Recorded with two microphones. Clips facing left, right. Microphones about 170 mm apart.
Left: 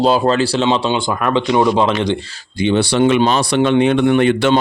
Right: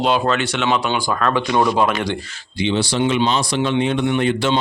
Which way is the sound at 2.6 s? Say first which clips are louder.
Left 5 dB; 55° left (ahead or behind).